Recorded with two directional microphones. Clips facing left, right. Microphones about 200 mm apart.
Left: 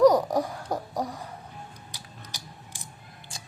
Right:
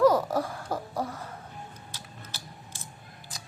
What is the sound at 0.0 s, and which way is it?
Babbling, 15° left (ahead or behind).